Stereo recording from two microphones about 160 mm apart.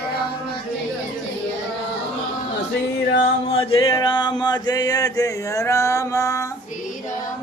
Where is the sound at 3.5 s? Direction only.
35° left (ahead or behind); by 6.5 s 20° left (ahead or behind).